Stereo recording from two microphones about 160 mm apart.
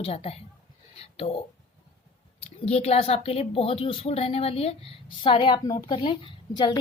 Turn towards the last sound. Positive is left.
turn(degrees=30)  # may be behind; listen again after turning